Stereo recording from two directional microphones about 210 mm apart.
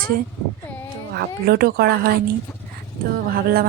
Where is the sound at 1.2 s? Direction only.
50° right (ahead or behind).